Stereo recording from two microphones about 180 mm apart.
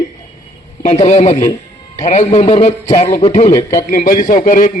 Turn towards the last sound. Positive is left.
turn(degrees=50)  # may be behind; listen again after turning